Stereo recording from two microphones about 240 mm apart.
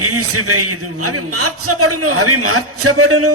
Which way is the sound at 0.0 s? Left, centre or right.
Right.